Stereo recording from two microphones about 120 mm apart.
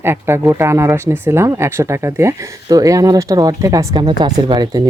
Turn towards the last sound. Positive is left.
turn(degrees=-35)  # may be behind; listen again after turning